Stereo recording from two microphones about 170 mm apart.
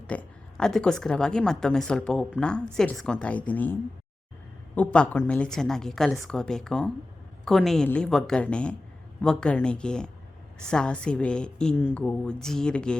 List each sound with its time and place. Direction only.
0.1 s a woman's voice: 5° left (ahead or behind)